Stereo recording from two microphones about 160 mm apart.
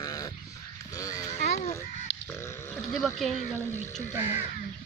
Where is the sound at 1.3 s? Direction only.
45° left (ahead or behind).